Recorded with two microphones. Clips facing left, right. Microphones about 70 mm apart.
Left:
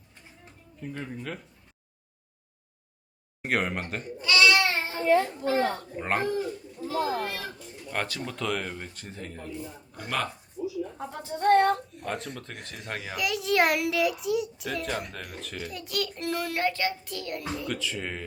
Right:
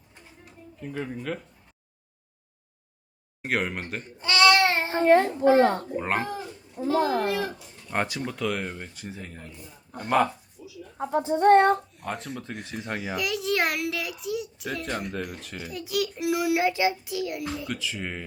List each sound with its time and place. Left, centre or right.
0.8 s a child's voice: centre
3.4 s a child's voice: centre
4.2 s a sound: right
6.0 s a child's voice: centre
6.8 s speech: right
7.9 s speech: centre
8.2 s speech: centre
10.0 s speech: centre
10.6 s a sound: left
10.9 s speech: right
11.9 s a child's voice: centre